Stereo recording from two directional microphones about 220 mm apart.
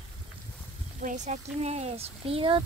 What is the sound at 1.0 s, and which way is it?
Speech, 35° right (ahead or behind).